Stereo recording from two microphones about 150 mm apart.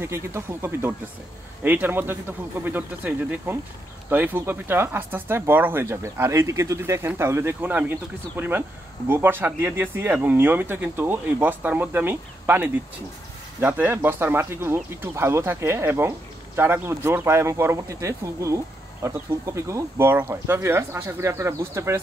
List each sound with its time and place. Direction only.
0.0 s speech: 15° right (ahead or behind)